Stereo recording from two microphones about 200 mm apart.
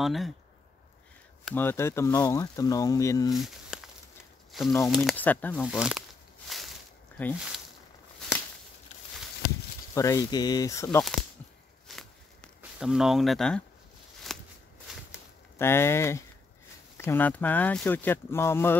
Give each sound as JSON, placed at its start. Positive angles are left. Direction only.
{"t": 0.0, "sound": "speech", "side_deg": 0}
{"t": 1.5, "sound": "speech", "side_deg": 10}
{"t": 3.3, "sound": "a sound", "side_deg": 0}
{"t": 5.0, "sound": "speech", "side_deg": 10}
{"t": 5.7, "sound": "speech", "side_deg": -5}
{"t": 7.2, "sound": "speech", "side_deg": 10}
{"t": 9.9, "sound": "speech", "side_deg": 15}
{"t": 11.9, "sound": "a sound", "side_deg": 0}
{"t": 12.7, "sound": "speech", "side_deg": 0}
{"t": 14.3, "sound": "a sound", "side_deg": 0}
{"t": 15.6, "sound": "speech", "side_deg": 10}